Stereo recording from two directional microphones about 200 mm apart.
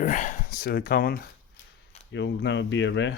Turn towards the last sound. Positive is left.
turn(degrees=65)  # may be behind; listen again after turning